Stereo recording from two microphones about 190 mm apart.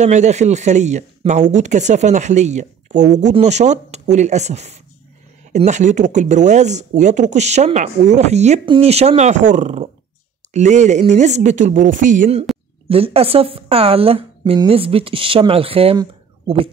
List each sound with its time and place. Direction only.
0.0 s a woman's voice: 40° right (ahead or behind)